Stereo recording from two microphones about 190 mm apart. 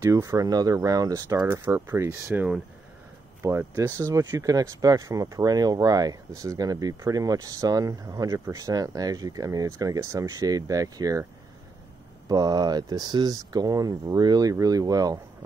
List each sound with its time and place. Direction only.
0.0 s speech: 15° right (ahead or behind)
12.3 s speech: 20° right (ahead or behind)